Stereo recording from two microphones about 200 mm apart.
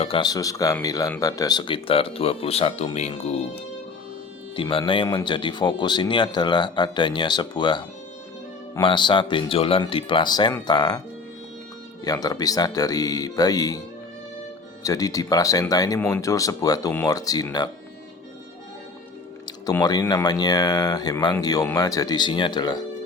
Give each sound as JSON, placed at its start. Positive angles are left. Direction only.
{"t": 0.0, "sound": "speech", "side_deg": 25}
{"t": 4.5, "sound": "speech", "side_deg": 25}
{"t": 12.0, "sound": "speech", "side_deg": 20}
{"t": 14.8, "sound": "speech", "side_deg": 15}
{"t": 19.6, "sound": "speech", "side_deg": 20}